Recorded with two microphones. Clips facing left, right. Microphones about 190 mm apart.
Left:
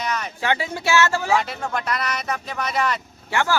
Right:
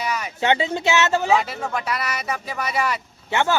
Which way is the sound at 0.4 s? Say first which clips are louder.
Right 4 dB; 25° right (ahead or behind).